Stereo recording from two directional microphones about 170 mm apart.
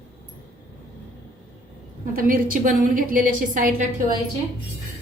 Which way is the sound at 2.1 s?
55° right (ahead or behind).